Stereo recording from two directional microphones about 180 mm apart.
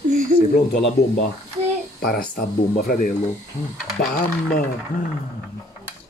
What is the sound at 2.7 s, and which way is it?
Speech, 55° left (ahead or behind).